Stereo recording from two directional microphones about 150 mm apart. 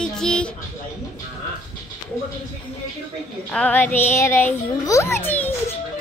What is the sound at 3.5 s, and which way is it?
A child's voice, 10° left (ahead or behind).